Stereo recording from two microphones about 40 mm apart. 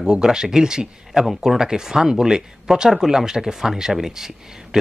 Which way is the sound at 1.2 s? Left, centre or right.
Centre.